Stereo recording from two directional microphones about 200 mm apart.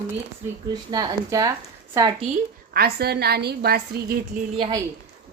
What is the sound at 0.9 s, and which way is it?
A woman's voice, 20° right (ahead or behind).